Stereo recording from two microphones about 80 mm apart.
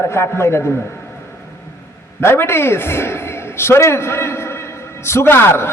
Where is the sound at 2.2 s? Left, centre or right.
Left.